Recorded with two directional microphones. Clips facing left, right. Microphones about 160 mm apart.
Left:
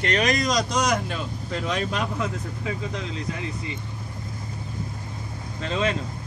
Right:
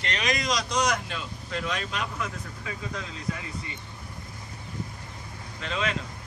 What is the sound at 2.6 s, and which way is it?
Speech, 25° left (ahead or behind).